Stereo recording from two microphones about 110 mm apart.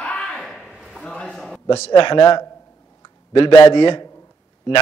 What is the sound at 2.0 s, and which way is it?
A man's voice, 45° left (ahead or behind).